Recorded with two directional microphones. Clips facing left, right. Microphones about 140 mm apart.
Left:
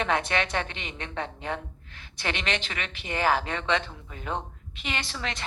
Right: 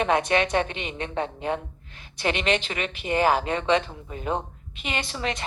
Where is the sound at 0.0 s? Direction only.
20° right (ahead or behind).